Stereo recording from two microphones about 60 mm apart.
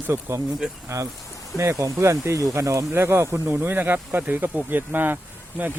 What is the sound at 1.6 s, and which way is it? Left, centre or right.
Speech, right.